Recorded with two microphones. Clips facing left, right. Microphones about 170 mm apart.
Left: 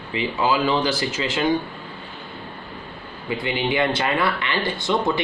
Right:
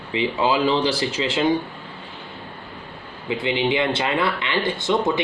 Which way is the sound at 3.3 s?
20° right (ahead or behind).